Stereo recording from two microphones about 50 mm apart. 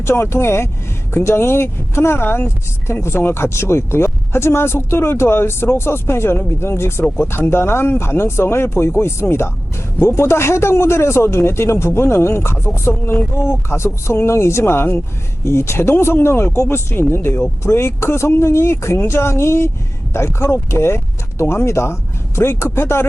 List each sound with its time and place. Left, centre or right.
0.0 s speech: left
15.4 s speech: left